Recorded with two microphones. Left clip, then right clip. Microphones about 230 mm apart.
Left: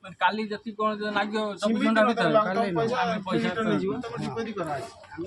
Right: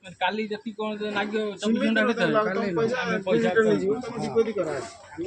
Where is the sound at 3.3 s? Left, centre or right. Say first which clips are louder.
Right 6 dB; centre.